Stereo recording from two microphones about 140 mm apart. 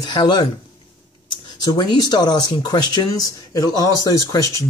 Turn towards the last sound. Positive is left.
turn(degrees=25)  # may be behind; listen again after turning